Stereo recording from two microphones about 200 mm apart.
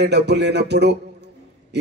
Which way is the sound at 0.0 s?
55° right (ahead or behind).